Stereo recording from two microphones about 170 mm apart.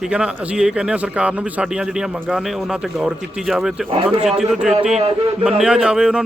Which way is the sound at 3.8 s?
35° right (ahead or behind).